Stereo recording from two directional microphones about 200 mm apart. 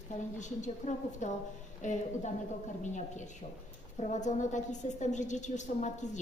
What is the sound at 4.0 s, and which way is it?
A woman's voice, 35° left (ahead or behind).